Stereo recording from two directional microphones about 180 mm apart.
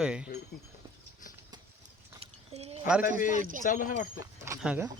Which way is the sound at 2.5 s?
35° right (ahead or behind).